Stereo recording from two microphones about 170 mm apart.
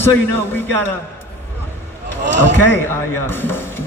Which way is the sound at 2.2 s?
90° right.